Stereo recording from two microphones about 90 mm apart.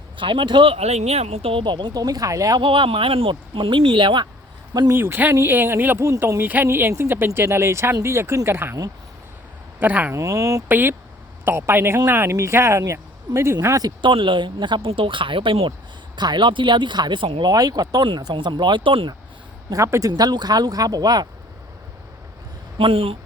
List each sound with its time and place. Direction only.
0.2 s speech: 65° right (ahead or behind)
1.4 s speech: 90° right
1.6 s speech: 55° right (ahead or behind); by 2.6 s 40° right (ahead or behind)
2.6 s speech: 75° right (ahead or behind)
4.9 s speech: 25° right (ahead or behind)
9.8 s speech: 20° right (ahead or behind)
10.2 s speech: 35° right (ahead or behind)
10.7 s speech: 25° right (ahead or behind)
13.8 s speech: 65° right (ahead or behind)
16.1 s speech: 55° right (ahead or behind); by 17.4 s 80° right
17.4 s speech: 45° right (ahead or behind); by 19.1 s 70° right (ahead or behind)
19.7 s speech: 35° right (ahead or behind)
22.8 s speech: 90° right